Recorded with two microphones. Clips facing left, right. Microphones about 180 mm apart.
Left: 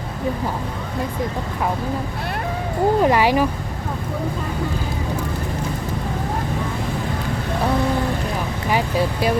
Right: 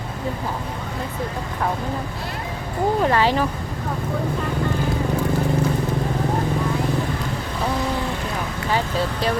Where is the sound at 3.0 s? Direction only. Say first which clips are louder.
Left 1 dB; 15° left (ahead or behind).